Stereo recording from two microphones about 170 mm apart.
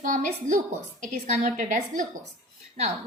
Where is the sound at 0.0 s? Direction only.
50° right (ahead or behind).